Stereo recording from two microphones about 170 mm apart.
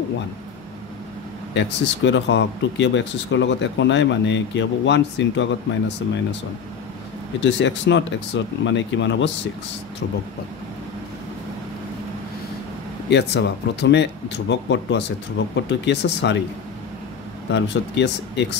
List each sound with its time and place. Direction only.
1.5 s speech: 90° left
7.3 s speech: 90° left
13.1 s speech: 90° left
17.5 s speech: 90° left